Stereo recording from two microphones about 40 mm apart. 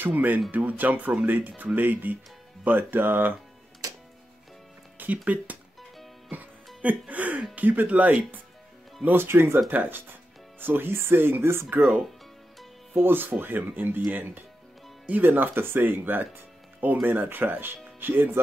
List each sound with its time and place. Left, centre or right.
0.1 s speech: right
4.9 s speech: right
9.1 s speech: right
9.7 s speech: right
13.0 s speech: right
17.2 s speech: right